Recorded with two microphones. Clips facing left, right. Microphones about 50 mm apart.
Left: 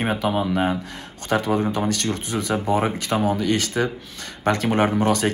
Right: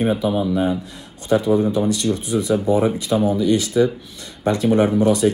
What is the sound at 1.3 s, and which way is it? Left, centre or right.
Speech, left.